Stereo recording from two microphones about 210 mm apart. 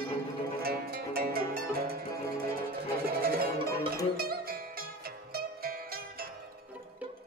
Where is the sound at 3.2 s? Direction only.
45° right (ahead or behind).